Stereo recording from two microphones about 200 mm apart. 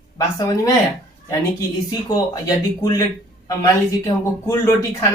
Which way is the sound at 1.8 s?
20° left (ahead or behind).